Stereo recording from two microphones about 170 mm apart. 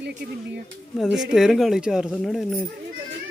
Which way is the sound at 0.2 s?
75° right (ahead or behind).